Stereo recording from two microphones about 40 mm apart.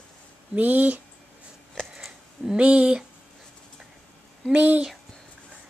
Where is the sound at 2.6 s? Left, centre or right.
Right.